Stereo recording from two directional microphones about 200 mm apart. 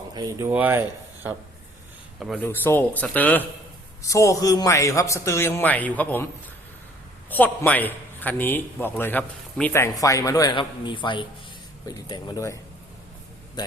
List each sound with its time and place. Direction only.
0.1 s speech: 20° right (ahead or behind); by 2.5 s centre (ahead or behind)
2.5 s a man's voice: 10° left (ahead or behind)
7.3 s a man's voice: 10° left (ahead or behind)
13.6 s speech: 20° left (ahead or behind)